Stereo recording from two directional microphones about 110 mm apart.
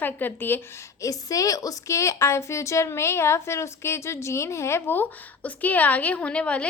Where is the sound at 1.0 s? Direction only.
30° left (ahead or behind).